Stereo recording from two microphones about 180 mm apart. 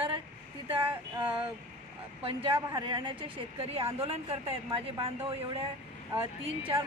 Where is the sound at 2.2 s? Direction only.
25° right (ahead or behind).